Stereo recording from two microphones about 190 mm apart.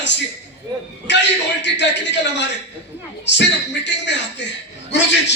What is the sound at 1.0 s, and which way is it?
Speech, 70° left (ahead or behind).